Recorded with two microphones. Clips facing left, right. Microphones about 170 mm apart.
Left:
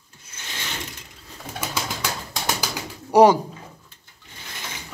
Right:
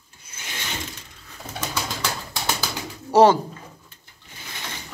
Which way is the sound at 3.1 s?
15° left (ahead or behind).